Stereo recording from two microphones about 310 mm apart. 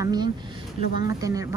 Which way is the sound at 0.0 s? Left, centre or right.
Centre.